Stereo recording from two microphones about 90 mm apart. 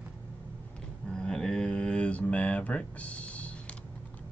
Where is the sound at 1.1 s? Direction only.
10° left (ahead or behind).